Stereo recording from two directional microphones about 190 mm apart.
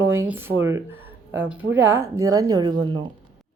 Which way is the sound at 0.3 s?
10° right (ahead or behind).